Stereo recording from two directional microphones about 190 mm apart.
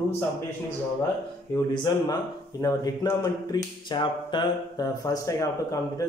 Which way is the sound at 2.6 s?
20° left (ahead or behind).